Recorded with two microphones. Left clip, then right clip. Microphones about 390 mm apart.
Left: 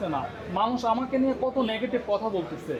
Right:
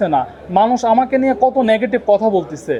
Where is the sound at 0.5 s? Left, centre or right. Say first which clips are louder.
Right 13 dB; right.